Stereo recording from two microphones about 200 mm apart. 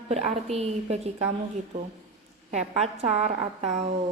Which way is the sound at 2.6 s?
30° right (ahead or behind).